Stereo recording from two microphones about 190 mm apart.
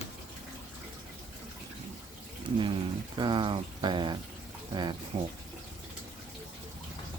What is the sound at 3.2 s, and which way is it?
Speech, 25° right (ahead or behind).